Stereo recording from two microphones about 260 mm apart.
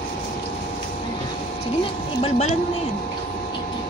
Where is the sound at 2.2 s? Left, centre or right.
Left.